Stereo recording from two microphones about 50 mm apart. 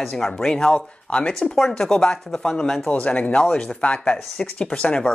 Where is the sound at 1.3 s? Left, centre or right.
Centre.